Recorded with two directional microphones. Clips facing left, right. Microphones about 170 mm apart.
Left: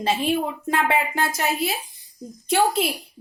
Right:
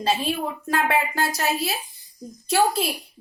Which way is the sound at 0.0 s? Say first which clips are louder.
Left 2 dB; 20° left (ahead or behind).